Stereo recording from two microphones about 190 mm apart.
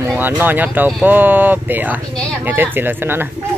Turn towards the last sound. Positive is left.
turn(degrees=-10)  # may be behind; listen again after turning